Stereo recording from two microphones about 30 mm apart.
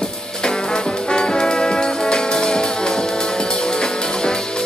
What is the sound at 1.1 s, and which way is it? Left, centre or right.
Brass instrument, left.